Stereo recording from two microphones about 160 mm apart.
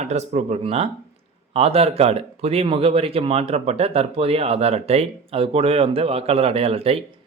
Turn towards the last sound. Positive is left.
turn(degrees=-40)  # may be behind; listen again after turning